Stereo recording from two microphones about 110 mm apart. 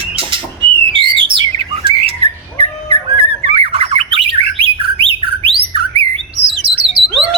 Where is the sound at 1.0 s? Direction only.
50° right (ahead or behind).